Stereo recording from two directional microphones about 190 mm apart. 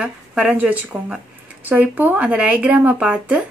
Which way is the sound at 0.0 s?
5° right (ahead or behind).